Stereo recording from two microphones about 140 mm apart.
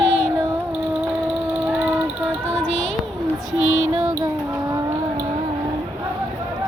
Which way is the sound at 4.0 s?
25° right (ahead or behind).